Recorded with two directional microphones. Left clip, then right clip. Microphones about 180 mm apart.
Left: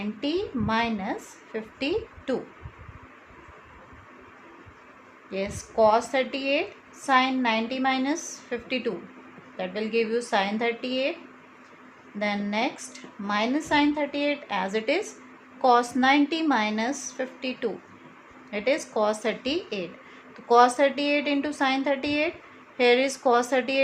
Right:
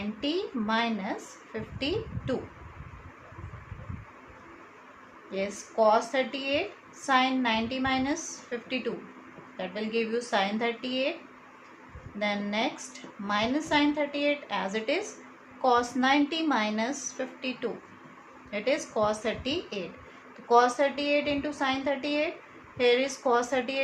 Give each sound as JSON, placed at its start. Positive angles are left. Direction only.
{"t": 0.2, "sound": "a woman's voice", "side_deg": 30}
{"t": 5.3, "sound": "a woman's voice", "side_deg": 35}
{"t": 12.2, "sound": "a woman's voice", "side_deg": 30}